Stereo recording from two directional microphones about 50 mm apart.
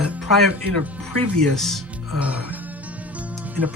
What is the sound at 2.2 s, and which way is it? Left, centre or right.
Speech, right.